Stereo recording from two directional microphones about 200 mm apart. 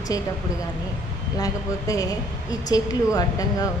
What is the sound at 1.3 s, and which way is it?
A woman's voice, 15° left (ahead or behind).